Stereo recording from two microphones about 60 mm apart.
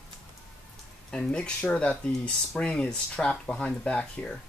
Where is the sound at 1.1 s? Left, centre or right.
Centre.